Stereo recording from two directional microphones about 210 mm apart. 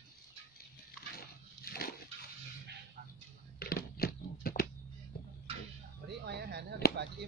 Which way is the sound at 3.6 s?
45° left (ahead or behind).